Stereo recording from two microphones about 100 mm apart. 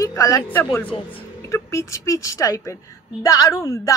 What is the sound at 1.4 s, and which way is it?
A woman's voice, 30° left (ahead or behind).